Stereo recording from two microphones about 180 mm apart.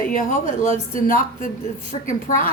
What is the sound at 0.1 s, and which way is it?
Speech, 45° left (ahead or behind).